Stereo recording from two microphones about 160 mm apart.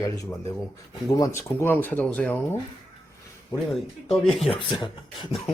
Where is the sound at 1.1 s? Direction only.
20° left (ahead or behind).